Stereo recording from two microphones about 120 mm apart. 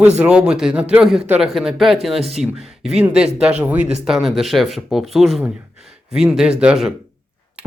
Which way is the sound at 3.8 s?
65° right (ahead or behind).